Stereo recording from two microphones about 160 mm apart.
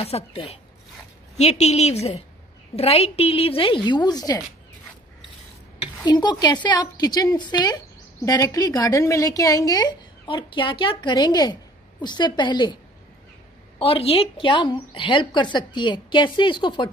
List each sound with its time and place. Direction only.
0.0 s a woman's voice: 35° left (ahead or behind)
5.8 s a woman's voice: 25° left (ahead or behind)
13.7 s a woman's voice: 35° left (ahead or behind)